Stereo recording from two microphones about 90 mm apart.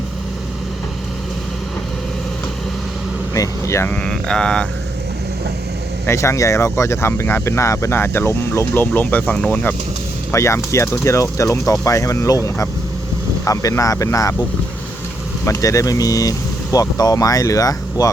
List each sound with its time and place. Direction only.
3.3 s speech: 35° left (ahead or behind)
4.0 s speech: 10° left (ahead or behind)
6.1 s speech: 35° left (ahead or behind); by 9.7 s 15° left (ahead or behind)
10.3 s speech: 35° left (ahead or behind)
15.4 s speech: 35° left (ahead or behind)